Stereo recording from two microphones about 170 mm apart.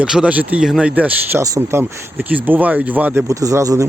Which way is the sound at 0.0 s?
5° right (ahead or behind).